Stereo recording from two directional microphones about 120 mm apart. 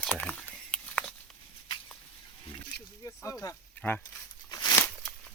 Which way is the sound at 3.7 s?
15° left (ahead or behind).